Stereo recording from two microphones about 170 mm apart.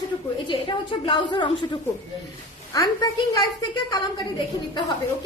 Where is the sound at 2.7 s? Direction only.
20° left (ahead or behind).